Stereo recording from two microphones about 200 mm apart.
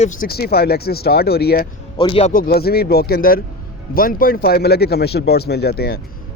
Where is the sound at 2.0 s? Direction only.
30° left (ahead or behind).